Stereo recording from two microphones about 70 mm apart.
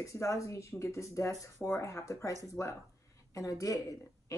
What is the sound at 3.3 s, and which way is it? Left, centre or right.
A woman's voice, left.